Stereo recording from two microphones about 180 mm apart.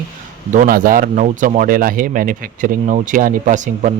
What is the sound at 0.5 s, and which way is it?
A man's voice, 50° right (ahead or behind).